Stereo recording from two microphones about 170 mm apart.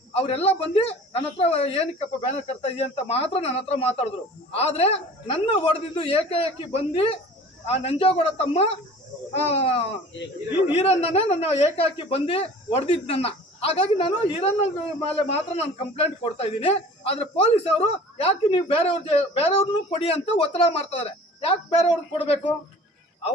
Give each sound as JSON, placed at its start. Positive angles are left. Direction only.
{"t": 0.1, "sound": "a man's voice", "side_deg": 35}